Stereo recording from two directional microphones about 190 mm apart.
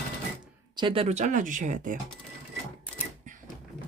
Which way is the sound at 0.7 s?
25° right (ahead or behind).